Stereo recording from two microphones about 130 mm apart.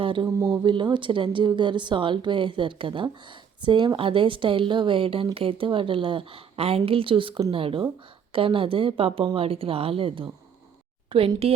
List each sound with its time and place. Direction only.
0.0 s speech: 40° right (ahead or behind)
0.3 s speech: 20° right (ahead or behind)
0.5 s speech: 40° right (ahead or behind)